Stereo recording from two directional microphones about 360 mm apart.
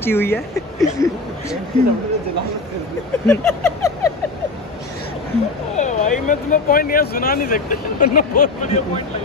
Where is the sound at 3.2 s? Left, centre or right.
Centre.